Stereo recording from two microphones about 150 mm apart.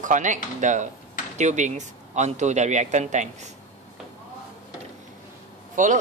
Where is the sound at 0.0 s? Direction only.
55° right (ahead or behind).